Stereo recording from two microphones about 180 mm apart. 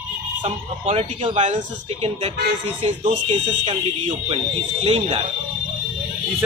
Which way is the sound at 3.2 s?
30° right (ahead or behind).